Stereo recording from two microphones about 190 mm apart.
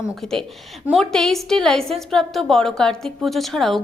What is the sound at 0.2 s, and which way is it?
A woman's voice, 5° left (ahead or behind).